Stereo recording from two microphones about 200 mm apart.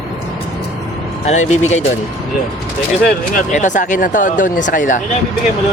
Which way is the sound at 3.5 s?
35° left (ahead or behind).